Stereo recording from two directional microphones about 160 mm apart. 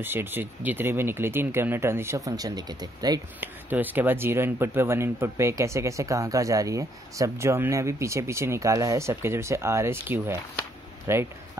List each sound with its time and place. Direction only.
0.0 s speech: 15° right (ahead or behind)
3.3 s speech: 10° right (ahead or behind)